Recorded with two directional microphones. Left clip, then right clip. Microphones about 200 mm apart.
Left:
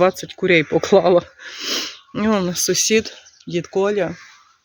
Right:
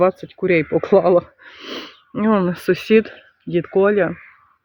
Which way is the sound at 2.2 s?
20° right (ahead or behind).